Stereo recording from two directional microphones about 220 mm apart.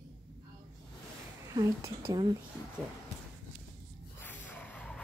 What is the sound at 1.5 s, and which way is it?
Speech, 15° right (ahead or behind).